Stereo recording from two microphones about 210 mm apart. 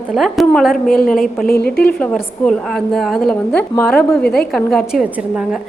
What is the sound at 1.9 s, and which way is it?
A woman's voice, 5° left (ahead or behind).